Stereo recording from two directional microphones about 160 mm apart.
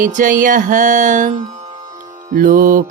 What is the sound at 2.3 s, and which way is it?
Mantra, 55° right (ahead or behind).